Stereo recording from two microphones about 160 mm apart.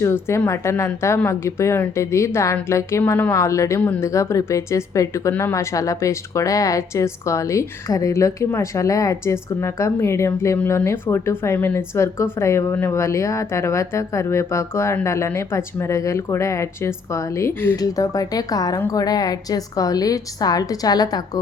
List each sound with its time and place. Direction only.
0.0 s a woman's voice: 15° left (ahead or behind)